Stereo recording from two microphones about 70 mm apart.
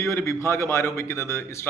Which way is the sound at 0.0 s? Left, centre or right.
Left.